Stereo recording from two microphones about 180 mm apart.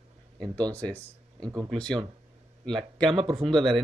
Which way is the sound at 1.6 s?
5° left (ahead or behind).